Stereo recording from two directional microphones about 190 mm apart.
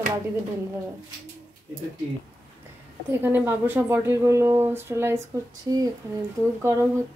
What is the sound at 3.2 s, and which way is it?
Speech, 10° right (ahead or behind).